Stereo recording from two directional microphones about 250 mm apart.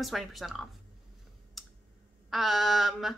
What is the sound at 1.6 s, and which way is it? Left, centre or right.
Clicking, centre.